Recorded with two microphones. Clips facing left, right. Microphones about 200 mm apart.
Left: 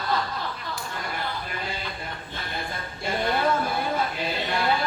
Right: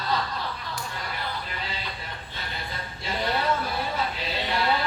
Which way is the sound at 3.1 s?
50° left (ahead or behind).